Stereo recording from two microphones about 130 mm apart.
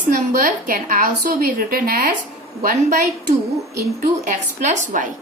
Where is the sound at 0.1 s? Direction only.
90° right.